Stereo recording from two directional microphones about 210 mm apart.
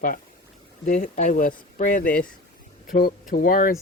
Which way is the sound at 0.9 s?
40° left (ahead or behind).